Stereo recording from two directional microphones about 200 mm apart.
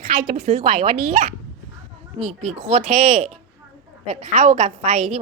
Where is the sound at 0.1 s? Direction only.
35° right (ahead or behind).